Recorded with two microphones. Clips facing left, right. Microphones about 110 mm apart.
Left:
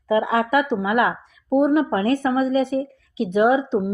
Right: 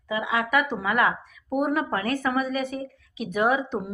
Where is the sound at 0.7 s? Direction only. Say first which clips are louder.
Left 4 dB; 25° left (ahead or behind).